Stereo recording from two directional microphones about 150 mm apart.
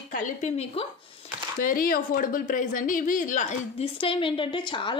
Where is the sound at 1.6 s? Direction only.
70° left (ahead or behind); by 3.8 s 55° left (ahead or behind).